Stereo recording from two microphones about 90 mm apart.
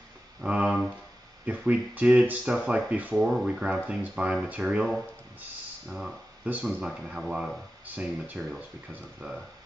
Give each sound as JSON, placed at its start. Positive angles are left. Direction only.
{"t": 0.4, "sound": "a sound", "side_deg": -10}
{"t": 1.4, "sound": "speech", "side_deg": -15}
{"t": 5.9, "sound": "speech", "side_deg": -10}
{"t": 7.8, "sound": "speech", "side_deg": -15}